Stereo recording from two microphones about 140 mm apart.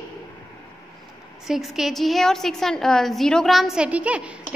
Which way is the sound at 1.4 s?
Centre (ahead or behind).